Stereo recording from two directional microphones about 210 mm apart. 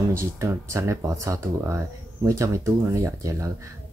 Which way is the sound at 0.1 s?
15° right (ahead or behind).